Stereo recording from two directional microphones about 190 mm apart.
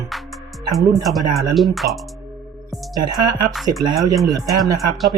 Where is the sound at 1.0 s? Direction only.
Centre (ahead or behind).